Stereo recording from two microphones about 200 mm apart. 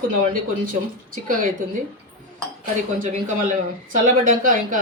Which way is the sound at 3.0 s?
40° right (ahead or behind).